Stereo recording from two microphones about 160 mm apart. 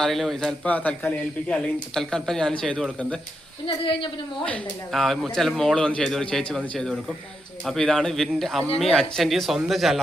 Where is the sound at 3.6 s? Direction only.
30° left (ahead or behind).